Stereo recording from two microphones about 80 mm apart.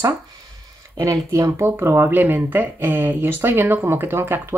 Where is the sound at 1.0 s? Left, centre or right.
Right.